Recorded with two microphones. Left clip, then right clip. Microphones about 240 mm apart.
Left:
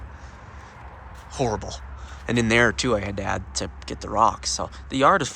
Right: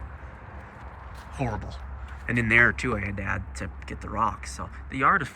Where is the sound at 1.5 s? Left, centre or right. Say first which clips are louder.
Left 7 dB; centre.